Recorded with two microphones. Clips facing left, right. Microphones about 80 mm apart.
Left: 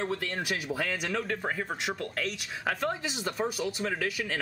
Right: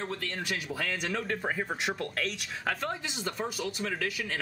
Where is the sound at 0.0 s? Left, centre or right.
Centre.